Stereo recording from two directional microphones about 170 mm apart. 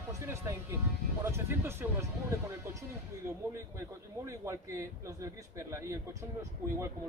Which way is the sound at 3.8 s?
15° right (ahead or behind).